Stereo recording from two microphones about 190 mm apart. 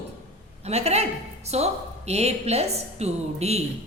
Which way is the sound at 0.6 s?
35° right (ahead or behind).